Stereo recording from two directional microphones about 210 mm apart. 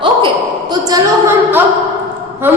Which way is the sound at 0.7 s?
15° right (ahead or behind).